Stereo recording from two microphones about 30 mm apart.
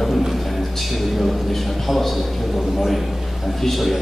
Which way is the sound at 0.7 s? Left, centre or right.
Centre.